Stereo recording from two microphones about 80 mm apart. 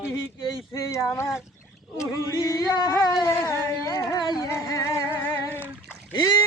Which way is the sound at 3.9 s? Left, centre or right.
Left.